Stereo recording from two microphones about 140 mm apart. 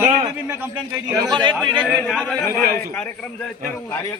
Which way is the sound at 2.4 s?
20° left (ahead or behind).